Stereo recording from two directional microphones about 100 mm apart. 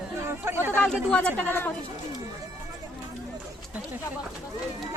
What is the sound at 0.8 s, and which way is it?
Speech, 10° left (ahead or behind).